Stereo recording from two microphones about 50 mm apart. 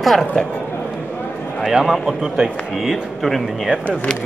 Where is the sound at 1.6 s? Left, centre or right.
Centre.